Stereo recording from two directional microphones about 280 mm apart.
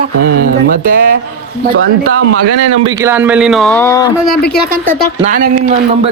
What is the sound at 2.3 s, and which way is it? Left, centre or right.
Speech, right.